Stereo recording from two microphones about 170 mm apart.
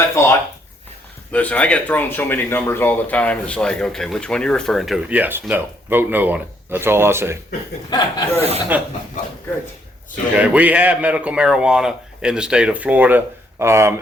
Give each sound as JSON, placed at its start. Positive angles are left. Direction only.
{"t": 0.2, "sound": "speech", "side_deg": 15}
{"t": 7.9, "sound": "speech", "side_deg": 20}
{"t": 8.7, "sound": "speech", "side_deg": -10}
{"t": 10.3, "sound": "speech", "side_deg": -10}